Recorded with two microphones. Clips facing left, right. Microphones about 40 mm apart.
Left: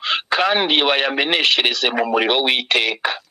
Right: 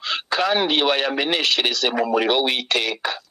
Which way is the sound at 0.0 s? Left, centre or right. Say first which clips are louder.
Left 4 dB; left.